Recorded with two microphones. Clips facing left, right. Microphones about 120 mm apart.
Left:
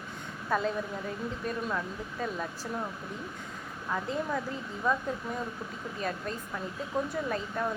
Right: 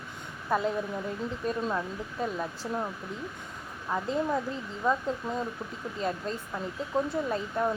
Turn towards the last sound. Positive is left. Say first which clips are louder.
# right 3 dB
turn(degrees=-20)  # may be behind; listen again after turning